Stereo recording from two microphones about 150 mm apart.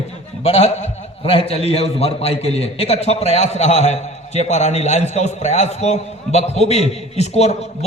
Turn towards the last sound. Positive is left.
turn(degrees=45)  # may be behind; listen again after turning